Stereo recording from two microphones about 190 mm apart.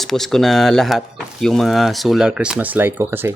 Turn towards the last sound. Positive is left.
turn(degrees=-15)  # may be behind; listen again after turning